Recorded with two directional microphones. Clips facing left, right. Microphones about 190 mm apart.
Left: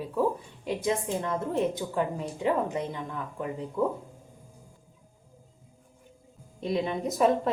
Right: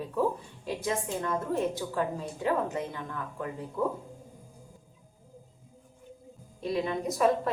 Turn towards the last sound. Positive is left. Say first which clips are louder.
# left 2 dB
turn(degrees=20)  # may be behind; listen again after turning